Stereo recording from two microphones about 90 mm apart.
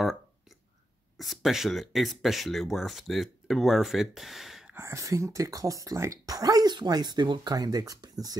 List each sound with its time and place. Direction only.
1.1 s speech: centre (ahead or behind)
4.7 s speech: 35° right (ahead or behind)